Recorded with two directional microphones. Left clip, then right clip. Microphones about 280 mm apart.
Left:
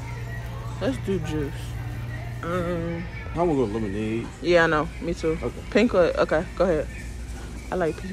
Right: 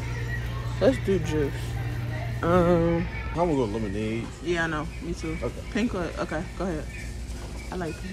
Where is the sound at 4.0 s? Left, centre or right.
Centre.